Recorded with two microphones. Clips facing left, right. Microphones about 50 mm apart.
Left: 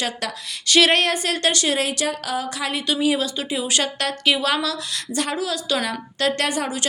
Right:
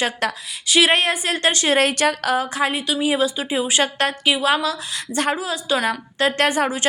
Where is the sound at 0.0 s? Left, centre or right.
Right.